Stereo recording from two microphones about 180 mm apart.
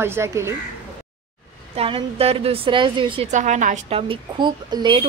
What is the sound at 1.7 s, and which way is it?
A woman's voice, 30° right (ahead or behind).